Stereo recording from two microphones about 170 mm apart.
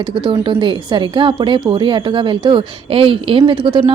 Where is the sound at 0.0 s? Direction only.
30° right (ahead or behind).